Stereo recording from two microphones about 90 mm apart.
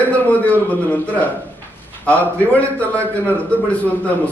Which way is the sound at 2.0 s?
15° left (ahead or behind).